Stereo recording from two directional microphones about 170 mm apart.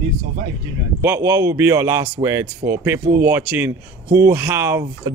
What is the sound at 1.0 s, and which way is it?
Speech, 15° right (ahead or behind).